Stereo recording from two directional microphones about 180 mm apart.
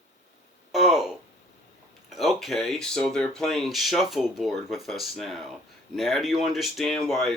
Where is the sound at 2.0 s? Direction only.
Centre (ahead or behind).